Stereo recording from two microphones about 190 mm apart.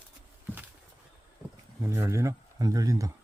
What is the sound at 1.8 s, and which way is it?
Speech, 15° right (ahead or behind).